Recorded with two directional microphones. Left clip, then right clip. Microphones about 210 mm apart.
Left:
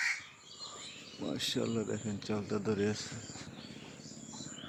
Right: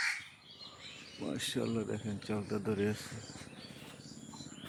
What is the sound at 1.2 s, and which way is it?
Speech, centre (ahead or behind).